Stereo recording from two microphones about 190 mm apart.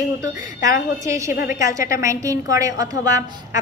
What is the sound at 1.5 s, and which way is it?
A woman's voice, 15° right (ahead or behind).